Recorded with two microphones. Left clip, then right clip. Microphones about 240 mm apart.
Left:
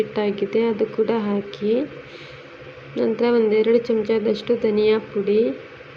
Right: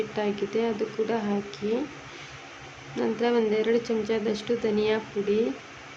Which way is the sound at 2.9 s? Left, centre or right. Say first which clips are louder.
Left 6 dB; centre.